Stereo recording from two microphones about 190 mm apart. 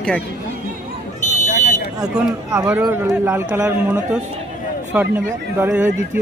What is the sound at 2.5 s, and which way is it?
A man's voice, 15° right (ahead or behind).